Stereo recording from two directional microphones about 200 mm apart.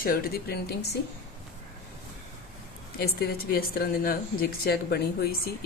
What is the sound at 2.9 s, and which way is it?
A woman's voice, 50° left (ahead or behind).